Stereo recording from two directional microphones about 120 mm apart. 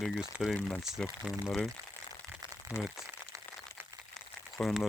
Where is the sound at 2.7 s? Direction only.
25° left (ahead or behind).